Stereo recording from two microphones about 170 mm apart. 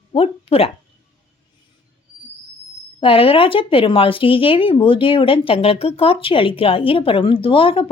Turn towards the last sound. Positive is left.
turn(degrees=30)  # may be behind; listen again after turning